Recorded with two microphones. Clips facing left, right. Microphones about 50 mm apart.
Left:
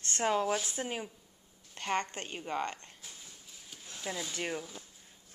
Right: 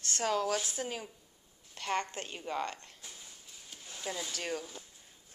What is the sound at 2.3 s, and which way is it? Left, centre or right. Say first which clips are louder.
Speech: left 1 dB; centre.